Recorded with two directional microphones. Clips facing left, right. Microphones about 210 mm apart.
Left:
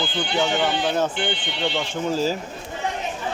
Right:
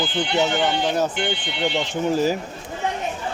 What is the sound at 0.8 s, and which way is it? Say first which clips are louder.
Speech: right 1 dB; 10° right (ahead or behind).